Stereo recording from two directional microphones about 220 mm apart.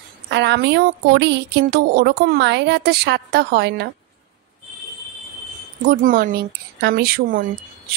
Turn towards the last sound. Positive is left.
turn(degrees=-40)  # may be behind; listen again after turning